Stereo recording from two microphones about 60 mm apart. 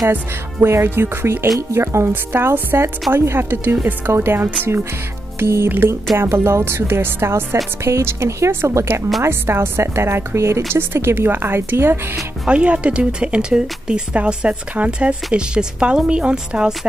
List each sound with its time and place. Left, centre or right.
0.1 s a woman's voice: right
2.3 s a woman's voice: right
7.8 s a woman's voice: right
10.7 s speech: right
12.4 s speech: right